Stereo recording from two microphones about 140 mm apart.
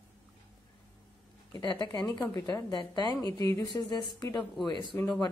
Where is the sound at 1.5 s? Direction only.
30° left (ahead or behind).